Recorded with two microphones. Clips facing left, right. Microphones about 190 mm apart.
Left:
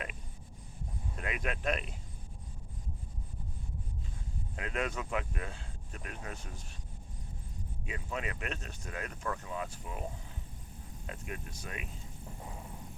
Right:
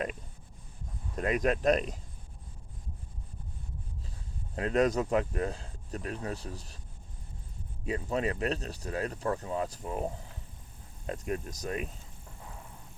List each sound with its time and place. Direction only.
1.1 s speech: 40° right (ahead or behind)
4.5 s speech: 35° right (ahead or behind)
7.9 s speech: 35° right (ahead or behind)